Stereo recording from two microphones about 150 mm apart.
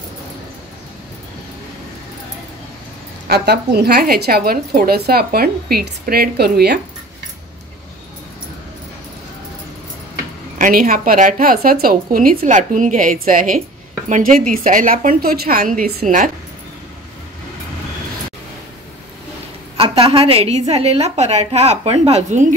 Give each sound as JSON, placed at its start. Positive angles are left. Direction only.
{"t": 3.3, "sound": "a woman's voice", "side_deg": -90}
{"t": 10.6, "sound": "speech", "side_deg": -70}
{"t": 19.8, "sound": "a woman's voice", "side_deg": -40}